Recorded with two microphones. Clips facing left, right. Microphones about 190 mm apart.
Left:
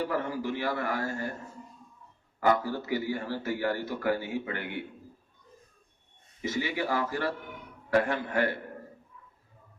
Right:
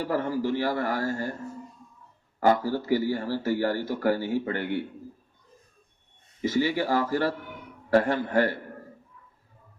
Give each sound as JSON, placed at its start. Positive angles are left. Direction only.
{"t": 0.1, "sound": "a man's voice", "side_deg": -35}
{"t": 2.4, "sound": "a man's voice", "side_deg": -35}
{"t": 6.5, "sound": "a man's voice", "side_deg": -35}